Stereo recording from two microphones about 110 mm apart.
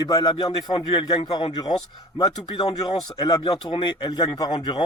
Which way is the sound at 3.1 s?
40° left (ahead or behind).